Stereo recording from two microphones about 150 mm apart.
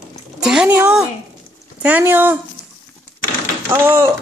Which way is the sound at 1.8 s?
10° right (ahead or behind).